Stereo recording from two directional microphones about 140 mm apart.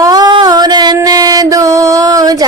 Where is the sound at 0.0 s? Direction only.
30° right (ahead or behind).